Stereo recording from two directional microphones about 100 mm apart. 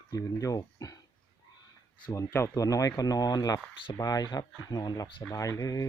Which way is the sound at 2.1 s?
30° left (ahead or behind).